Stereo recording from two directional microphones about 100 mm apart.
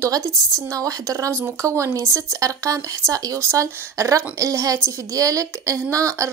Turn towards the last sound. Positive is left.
turn(degrees=-30)  # may be behind; listen again after turning